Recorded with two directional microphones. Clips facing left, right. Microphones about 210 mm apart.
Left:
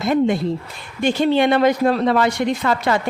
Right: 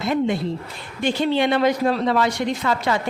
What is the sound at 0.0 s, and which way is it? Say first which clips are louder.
A woman's voice: left 4 dB; 45° left (ahead or behind).